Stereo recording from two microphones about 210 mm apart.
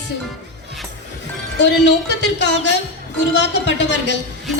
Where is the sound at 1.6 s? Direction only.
55° left (ahead or behind).